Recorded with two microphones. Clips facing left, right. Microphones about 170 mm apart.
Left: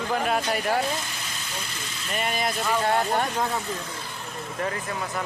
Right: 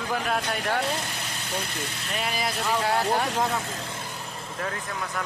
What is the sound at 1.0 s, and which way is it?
Speech, 60° right (ahead or behind).